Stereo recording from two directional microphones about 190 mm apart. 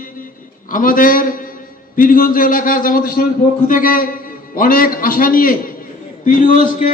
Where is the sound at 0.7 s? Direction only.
45° left (ahead or behind).